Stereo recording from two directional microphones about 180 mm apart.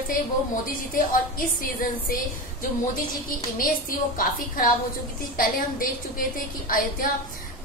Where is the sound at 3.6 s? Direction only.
50° left (ahead or behind).